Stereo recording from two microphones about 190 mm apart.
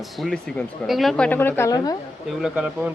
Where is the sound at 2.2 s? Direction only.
5° right (ahead or behind).